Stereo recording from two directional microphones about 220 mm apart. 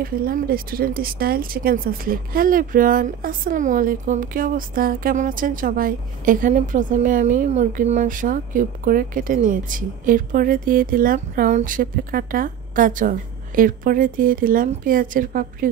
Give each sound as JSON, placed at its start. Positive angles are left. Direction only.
{"t": 0.0, "sound": "speech", "side_deg": -40}